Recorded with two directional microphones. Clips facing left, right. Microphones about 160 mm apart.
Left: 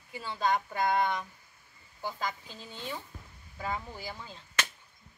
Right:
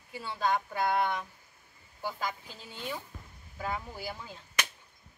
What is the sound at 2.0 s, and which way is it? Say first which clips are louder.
Speech: even; 10° right (ahead or behind).